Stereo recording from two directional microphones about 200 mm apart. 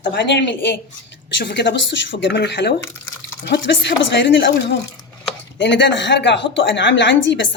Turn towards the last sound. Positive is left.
turn(degrees=65)  # may be behind; listen again after turning